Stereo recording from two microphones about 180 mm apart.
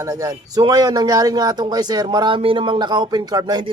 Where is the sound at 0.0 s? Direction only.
20° right (ahead or behind).